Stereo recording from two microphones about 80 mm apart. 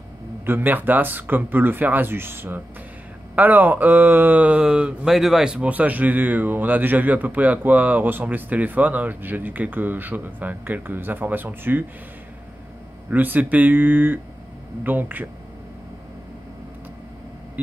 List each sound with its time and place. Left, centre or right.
0.5 s speech: right
13.1 s speech: right